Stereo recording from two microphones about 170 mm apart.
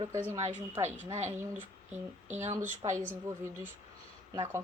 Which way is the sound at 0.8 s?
40° right (ahead or behind).